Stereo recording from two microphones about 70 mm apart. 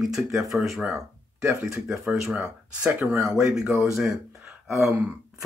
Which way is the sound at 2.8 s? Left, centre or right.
Centre.